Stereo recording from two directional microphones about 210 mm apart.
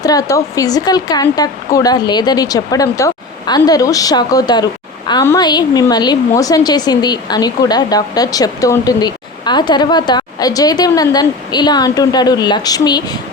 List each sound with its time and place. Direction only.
0.0 s speech: 15° left (ahead or behind)